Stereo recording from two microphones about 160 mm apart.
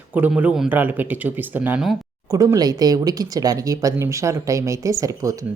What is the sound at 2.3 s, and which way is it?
Speech, 20° right (ahead or behind).